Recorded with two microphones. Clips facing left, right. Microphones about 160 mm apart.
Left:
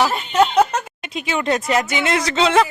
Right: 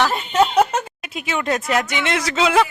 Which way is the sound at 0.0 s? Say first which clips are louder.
Left 1 dB; centre (ahead or behind).